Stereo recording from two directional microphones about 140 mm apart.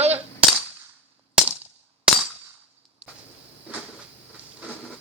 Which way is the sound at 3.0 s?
5° right (ahead or behind).